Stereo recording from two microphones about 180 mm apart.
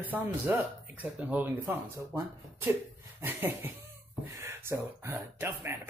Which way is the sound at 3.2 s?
10° right (ahead or behind).